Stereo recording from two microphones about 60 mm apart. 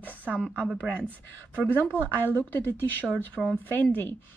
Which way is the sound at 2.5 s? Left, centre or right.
Left.